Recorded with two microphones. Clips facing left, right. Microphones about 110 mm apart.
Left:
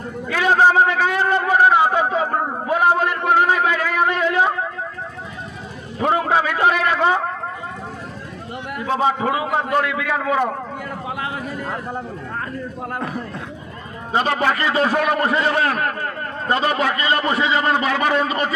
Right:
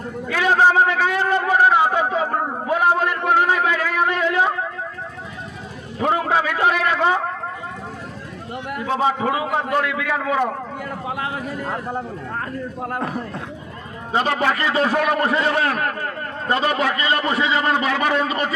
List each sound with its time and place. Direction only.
0.3 s a sound: 30° left (ahead or behind)
6.1 s a sound: 25° left (ahead or behind)
9.8 s a man's voice: 25° left (ahead or behind)
11.0 s a man's voice: 40° right (ahead or behind)
11.9 s a man's voice: 50° right (ahead or behind)
14.1 s a man's voice: 25° left (ahead or behind)